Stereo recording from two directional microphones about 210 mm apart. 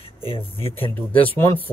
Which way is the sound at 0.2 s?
25° left (ahead or behind).